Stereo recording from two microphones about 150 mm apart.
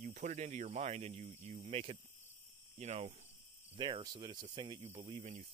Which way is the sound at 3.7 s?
30° right (ahead or behind).